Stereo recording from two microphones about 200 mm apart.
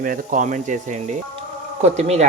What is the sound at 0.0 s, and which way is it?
Speech, 40° right (ahead or behind).